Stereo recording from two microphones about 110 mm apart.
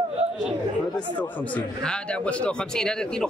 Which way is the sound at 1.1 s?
10° left (ahead or behind).